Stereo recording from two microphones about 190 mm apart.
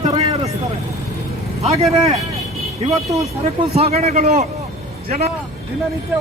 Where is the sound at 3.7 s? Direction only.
35° right (ahead or behind).